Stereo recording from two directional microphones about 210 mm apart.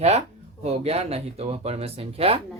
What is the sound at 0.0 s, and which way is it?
Speech, 30° right (ahead or behind).